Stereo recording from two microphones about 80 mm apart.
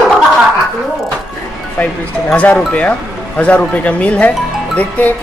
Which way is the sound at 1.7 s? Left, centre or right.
Centre.